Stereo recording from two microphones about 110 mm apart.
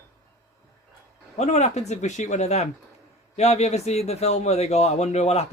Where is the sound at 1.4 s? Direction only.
90° left.